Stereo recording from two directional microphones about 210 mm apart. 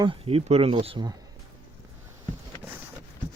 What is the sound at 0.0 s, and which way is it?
Speech, 25° right (ahead or behind).